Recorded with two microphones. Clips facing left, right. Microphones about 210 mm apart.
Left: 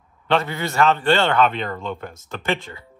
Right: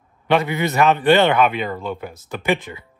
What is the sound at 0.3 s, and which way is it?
Speech, 15° right (ahead or behind).